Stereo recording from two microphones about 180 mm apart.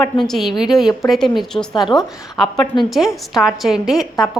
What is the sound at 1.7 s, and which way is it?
Speech, 25° left (ahead or behind).